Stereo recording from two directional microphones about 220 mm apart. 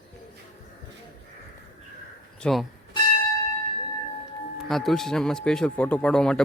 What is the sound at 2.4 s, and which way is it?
Speech, centre (ahead or behind).